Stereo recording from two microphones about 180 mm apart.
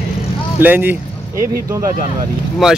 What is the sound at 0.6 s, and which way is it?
Speech, 10° right (ahead or behind).